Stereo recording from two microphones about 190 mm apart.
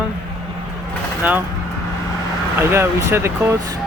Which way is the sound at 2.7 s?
15° right (ahead or behind).